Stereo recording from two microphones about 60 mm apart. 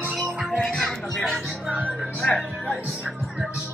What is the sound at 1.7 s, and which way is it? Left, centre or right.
Speech, right.